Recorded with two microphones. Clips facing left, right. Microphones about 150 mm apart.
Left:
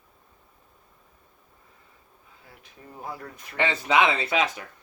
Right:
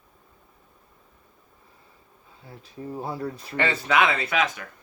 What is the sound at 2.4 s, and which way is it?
Speech, 30° right (ahead or behind).